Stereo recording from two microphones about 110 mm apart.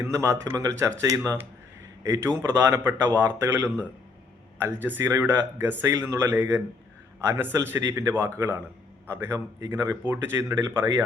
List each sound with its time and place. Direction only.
0.1 s speech: 30° right (ahead or behind)